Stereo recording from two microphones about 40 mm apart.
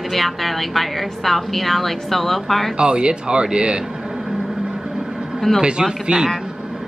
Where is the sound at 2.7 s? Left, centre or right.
Right.